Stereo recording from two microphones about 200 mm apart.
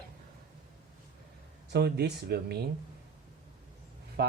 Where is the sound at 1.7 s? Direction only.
55° right (ahead or behind).